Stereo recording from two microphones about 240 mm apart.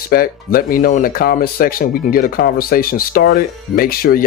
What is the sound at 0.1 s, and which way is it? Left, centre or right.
Speech, left.